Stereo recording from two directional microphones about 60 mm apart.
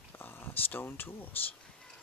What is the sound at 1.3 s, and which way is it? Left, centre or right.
Speech, left.